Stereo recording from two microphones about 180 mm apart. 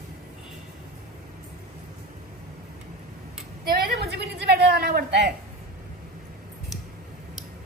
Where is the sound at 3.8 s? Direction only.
65° right (ahead or behind).